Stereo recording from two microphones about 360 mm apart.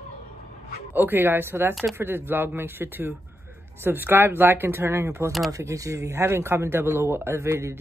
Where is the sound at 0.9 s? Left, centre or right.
Centre.